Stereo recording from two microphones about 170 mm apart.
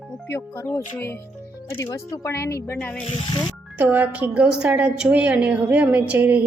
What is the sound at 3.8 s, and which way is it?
A woman's voice, 10° right (ahead or behind).